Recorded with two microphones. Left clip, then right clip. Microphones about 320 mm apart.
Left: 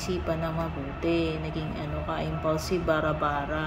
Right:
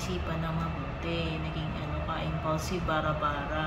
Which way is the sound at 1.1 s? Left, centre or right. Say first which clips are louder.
Left 7 dB; centre.